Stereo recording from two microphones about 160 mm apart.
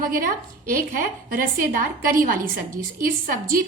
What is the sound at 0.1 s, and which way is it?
A woman's voice, 60° right (ahead or behind).